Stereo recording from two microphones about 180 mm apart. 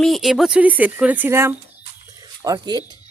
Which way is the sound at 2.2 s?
20° right (ahead or behind).